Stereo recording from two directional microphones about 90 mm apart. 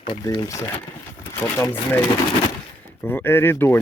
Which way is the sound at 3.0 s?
25° left (ahead or behind).